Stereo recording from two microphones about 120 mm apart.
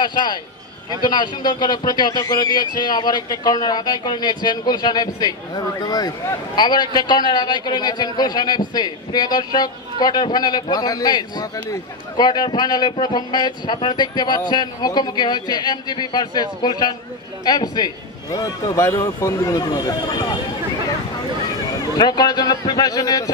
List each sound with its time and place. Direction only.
0.0 s a man's voice: 40° left (ahead or behind)
21.9 s a man's voice: 35° left (ahead or behind)